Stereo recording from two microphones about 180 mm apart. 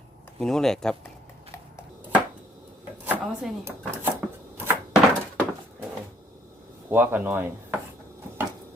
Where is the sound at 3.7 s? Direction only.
10° right (ahead or behind).